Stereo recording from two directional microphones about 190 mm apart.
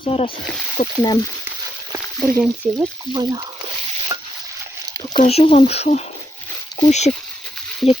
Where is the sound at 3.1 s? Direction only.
20° right (ahead or behind).